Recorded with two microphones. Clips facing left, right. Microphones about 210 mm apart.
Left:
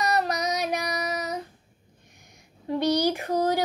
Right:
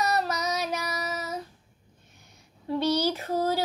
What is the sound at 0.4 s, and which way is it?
Female singing, 15° left (ahead or behind).